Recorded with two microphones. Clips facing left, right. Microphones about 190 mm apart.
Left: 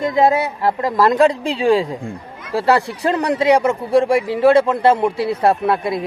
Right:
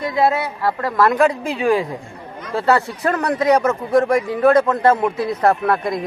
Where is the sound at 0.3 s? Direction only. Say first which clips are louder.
Left 3 dB; 20° left (ahead or behind).